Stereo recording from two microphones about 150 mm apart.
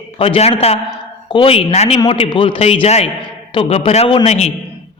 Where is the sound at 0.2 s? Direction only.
40° left (ahead or behind).